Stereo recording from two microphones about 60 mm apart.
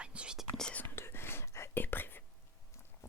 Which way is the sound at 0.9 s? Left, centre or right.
Left.